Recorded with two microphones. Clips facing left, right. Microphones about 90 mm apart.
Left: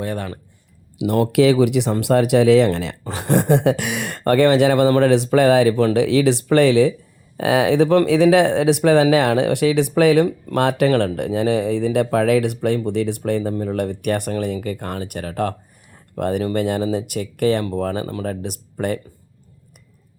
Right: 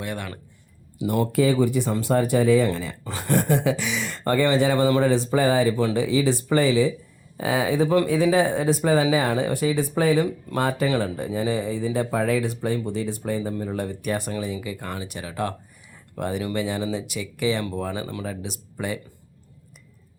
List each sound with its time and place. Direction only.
0.0 s speech: 40° left (ahead or behind)
0.9 s speech: 70° left (ahead or behind)
7.3 s speech: 90° left
10.2 s speech: 70° left (ahead or behind)
18.0 s speech: 35° left (ahead or behind)
18.3 s speech: 50° left (ahead or behind)